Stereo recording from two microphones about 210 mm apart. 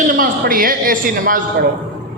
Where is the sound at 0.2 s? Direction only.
40° right (ahead or behind).